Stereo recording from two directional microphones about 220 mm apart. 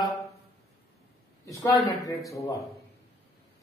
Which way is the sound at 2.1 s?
15° left (ahead or behind).